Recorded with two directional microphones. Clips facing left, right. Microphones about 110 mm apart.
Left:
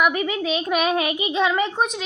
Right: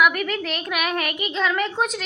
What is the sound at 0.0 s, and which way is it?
A child's voice, 20° left (ahead or behind).